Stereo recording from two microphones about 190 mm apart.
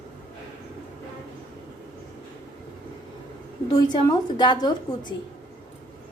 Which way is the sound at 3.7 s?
20° left (ahead or behind).